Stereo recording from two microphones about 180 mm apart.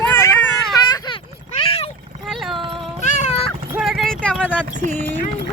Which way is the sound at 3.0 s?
35° left (ahead or behind).